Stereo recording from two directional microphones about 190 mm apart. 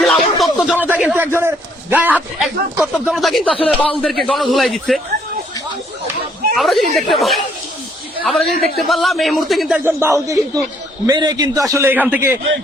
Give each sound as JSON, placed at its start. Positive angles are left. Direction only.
{"t": 0.0, "sound": "a sound", "side_deg": 0}
{"t": 2.7, "sound": "a man's voice", "side_deg": -5}
{"t": 6.6, "sound": "a man's voice", "side_deg": 0}